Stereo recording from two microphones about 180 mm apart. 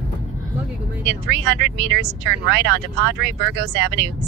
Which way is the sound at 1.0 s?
70° right (ahead or behind).